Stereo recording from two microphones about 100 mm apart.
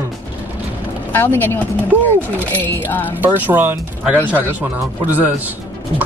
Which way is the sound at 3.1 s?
20° right (ahead or behind).